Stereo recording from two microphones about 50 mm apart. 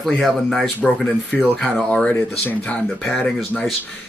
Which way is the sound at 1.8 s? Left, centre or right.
Left.